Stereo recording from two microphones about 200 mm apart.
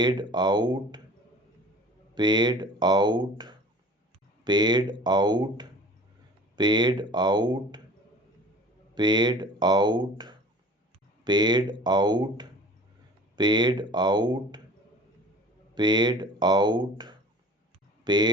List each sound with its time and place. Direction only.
0.0 s speech: 20° right (ahead or behind)
2.1 s speech: 20° right (ahead or behind)
9.0 s speech: 20° right (ahead or behind)
15.7 s speech: 20° right (ahead or behind)